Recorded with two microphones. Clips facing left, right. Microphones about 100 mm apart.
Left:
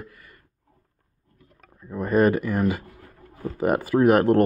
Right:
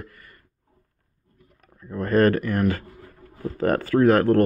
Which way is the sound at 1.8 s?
10° left (ahead or behind).